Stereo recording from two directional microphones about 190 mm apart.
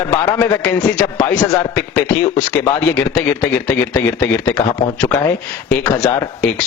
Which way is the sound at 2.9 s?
10° left (ahead or behind).